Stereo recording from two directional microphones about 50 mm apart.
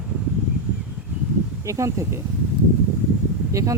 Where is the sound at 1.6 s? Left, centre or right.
Right.